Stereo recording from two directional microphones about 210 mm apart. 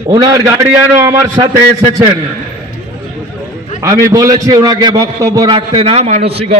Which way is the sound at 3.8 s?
15° right (ahead or behind).